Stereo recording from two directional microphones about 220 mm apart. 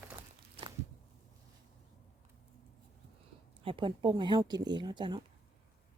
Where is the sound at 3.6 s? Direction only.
25° right (ahead or behind).